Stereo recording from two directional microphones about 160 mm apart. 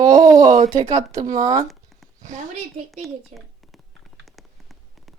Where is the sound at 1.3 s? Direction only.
50° right (ahead or behind).